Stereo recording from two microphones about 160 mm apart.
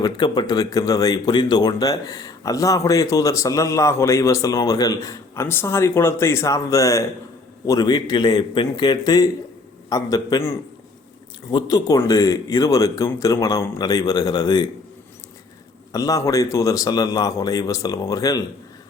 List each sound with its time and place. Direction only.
0.0 s speech: 25° left (ahead or behind)
15.9 s speech: 20° left (ahead or behind)